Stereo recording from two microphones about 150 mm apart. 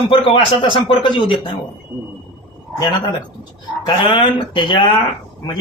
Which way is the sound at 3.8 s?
35° left (ahead or behind).